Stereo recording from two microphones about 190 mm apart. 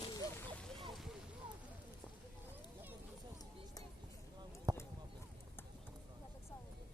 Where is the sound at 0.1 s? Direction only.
20° left (ahead or behind).